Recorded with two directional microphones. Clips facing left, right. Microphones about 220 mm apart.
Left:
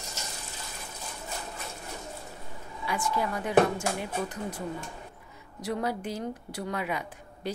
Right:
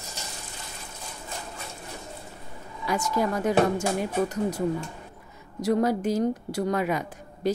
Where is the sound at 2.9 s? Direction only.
45° right (ahead or behind).